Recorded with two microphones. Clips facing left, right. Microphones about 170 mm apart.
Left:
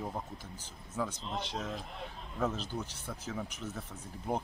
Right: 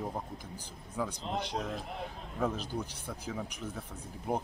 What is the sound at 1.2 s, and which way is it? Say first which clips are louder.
Speech: right 3 dB; 55° right (ahead or behind).